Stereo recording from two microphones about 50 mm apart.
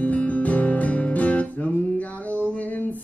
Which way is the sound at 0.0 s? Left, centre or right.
Left.